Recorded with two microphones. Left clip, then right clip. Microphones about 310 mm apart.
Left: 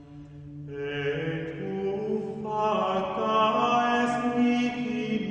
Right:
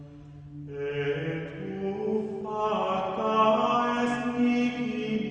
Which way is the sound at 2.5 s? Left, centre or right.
Centre.